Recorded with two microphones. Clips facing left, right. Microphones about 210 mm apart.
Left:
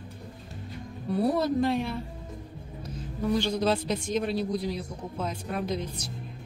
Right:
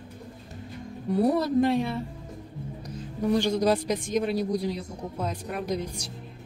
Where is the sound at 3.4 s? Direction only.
15° right (ahead or behind).